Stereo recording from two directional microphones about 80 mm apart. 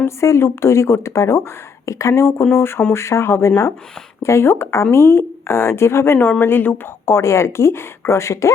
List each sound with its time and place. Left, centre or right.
0.0 s speech: left